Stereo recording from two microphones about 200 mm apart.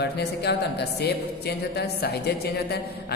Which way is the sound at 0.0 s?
55° left (ahead or behind).